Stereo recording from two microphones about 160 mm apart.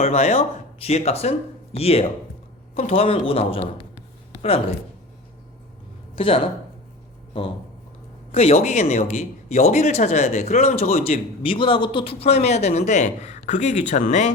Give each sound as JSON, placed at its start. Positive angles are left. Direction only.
{"t": 0.0, "sound": "speech", "side_deg": 45}
{"t": 6.1, "sound": "speech", "side_deg": 35}
{"t": 8.3, "sound": "speech", "side_deg": 40}